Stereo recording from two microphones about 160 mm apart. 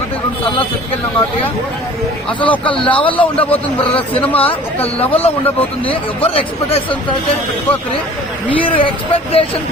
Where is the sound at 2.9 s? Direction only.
35° left (ahead or behind).